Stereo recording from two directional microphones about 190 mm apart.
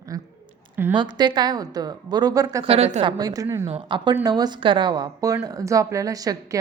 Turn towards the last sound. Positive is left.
turn(degrees=-20)  # may be behind; listen again after turning